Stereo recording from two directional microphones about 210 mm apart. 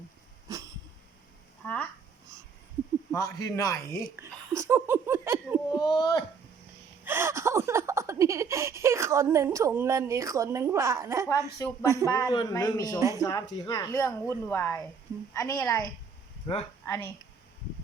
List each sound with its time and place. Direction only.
0.4 s a sound: 15° right (ahead or behind)
1.6 s a sound: 5° left (ahead or behind)
3.1 s a woman's voice: 15° left (ahead or behind)
4.2 s laughter: 10° right (ahead or behind)
5.7 s speech: 20° left (ahead or behind)
7.0 s speech: 10° right (ahead or behind)
12.1 s a woman's voice: 20° left (ahead or behind)
13.0 s speech: 15° right (ahead or behind)
13.2 s a woman's voice: 20° left (ahead or behind)
16.8 s speech: 15° left (ahead or behind)